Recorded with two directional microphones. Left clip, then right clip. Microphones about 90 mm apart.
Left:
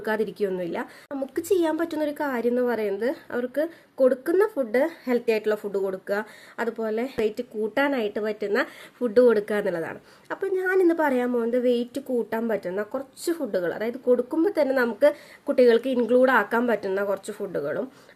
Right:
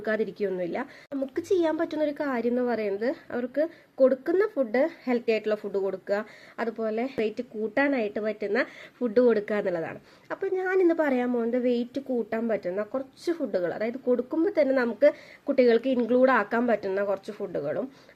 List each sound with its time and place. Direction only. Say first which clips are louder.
0.0 s a woman's voice: left 2 dB; 35° left (ahead or behind)